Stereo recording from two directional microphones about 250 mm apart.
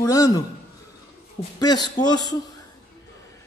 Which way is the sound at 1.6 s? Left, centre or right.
Centre.